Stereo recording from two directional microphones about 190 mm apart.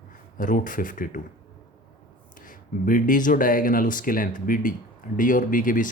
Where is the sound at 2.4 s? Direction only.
45° left (ahead or behind).